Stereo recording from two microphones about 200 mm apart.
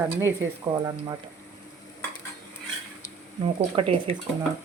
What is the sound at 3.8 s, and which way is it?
Speech, 25° right (ahead or behind).